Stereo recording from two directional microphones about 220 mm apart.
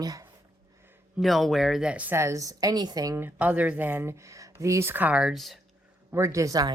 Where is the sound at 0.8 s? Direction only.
10° right (ahead or behind).